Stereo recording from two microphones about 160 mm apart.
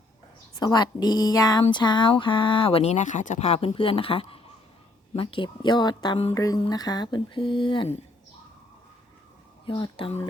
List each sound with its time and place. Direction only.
0.5 s music: 25° left (ahead or behind)
1.7 s speech: 30° left (ahead or behind)
6.3 s music: 20° left (ahead or behind)
9.6 s speech: 30° left (ahead or behind)